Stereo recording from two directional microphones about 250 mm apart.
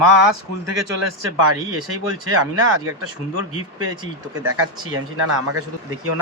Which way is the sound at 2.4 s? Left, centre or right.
Right.